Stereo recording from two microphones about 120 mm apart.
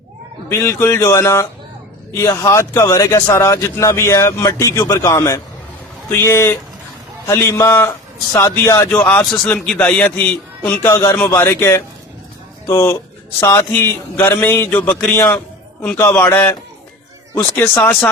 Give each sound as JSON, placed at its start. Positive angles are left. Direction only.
{"t": 0.4, "sound": "speech", "side_deg": 20}
{"t": 8.9, "sound": "a man's voice", "side_deg": 15}